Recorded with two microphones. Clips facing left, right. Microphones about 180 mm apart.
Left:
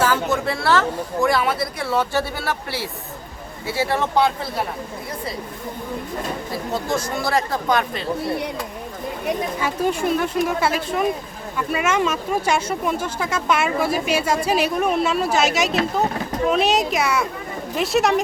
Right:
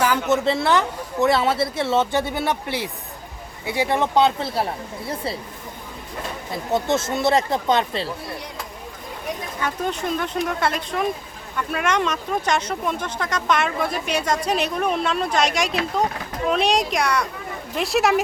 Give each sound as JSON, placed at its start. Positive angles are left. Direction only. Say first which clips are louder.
{"t": 0.0, "sound": "a sound", "louder": "even", "side_deg": -15}
{"t": 0.4, "sound": "speech", "louder": "even", "side_deg": -20}
{"t": 6.7, "sound": "speech", "louder": "right 3 dB", "side_deg": -25}
{"t": 9.6, "sound": "speech", "louder": "left 4 dB", "side_deg": 5}